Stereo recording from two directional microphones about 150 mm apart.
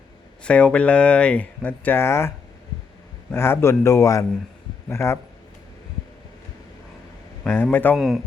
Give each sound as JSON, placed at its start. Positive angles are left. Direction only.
{"t": 0.4, "sound": "speech", "side_deg": 10}
{"t": 3.3, "sound": "a man's voice", "side_deg": 15}
{"t": 7.4, "sound": "speech", "side_deg": 15}
{"t": 7.9, "sound": "a man's voice", "side_deg": 0}